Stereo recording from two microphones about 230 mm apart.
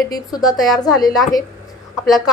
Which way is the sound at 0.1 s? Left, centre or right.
Centre.